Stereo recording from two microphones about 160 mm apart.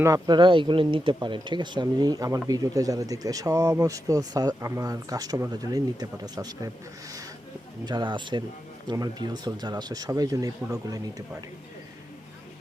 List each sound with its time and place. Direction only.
0.0 s speech: 25° right (ahead or behind)
7.9 s speech: 25° right (ahead or behind)